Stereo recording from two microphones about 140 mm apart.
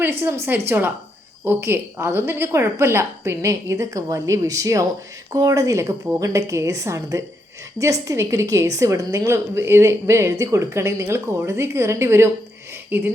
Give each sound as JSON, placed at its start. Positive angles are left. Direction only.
{"t": 0.0, "sound": "a woman's voice", "side_deg": -15}